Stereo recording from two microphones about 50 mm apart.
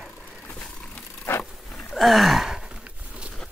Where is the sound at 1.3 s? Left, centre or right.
Left.